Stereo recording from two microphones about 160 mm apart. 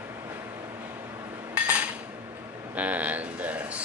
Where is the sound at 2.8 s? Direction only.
10° right (ahead or behind).